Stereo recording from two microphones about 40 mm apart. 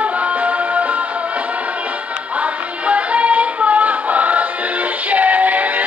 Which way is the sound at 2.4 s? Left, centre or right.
Right.